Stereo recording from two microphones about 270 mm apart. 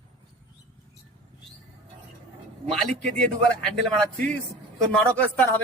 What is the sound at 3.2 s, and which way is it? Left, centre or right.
Speech, centre.